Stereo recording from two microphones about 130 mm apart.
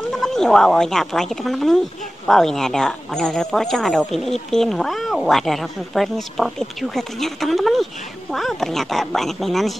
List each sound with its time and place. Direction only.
0.1 s speech: centre (ahead or behind)